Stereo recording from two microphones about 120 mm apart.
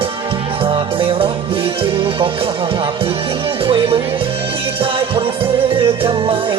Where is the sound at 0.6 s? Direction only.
50° right (ahead or behind).